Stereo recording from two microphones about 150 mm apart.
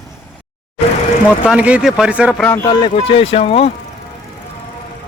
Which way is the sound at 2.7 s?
35° left (ahead or behind).